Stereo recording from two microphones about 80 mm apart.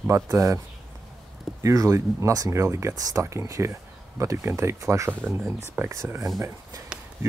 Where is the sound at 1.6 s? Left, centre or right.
Right.